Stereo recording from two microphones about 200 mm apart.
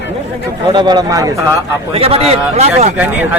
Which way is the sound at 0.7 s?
20° right (ahead or behind).